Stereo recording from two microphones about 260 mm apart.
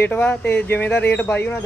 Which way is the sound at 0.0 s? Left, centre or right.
Centre.